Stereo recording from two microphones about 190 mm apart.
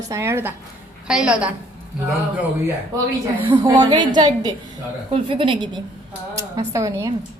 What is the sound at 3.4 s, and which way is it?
A woman's voice, 25° right (ahead or behind).